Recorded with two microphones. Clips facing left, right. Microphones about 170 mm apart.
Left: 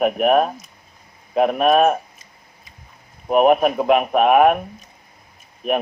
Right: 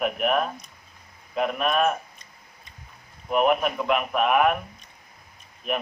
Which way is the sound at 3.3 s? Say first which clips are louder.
Left 7 dB; 50° left (ahead or behind).